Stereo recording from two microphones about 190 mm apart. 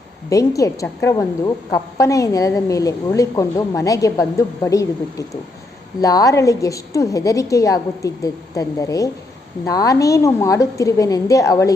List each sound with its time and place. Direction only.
0.3 s a woman's voice: 15° left (ahead or behind)